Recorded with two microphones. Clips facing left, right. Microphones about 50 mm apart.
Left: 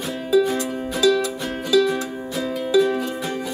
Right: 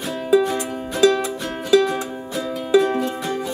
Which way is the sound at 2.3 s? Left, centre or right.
Centre.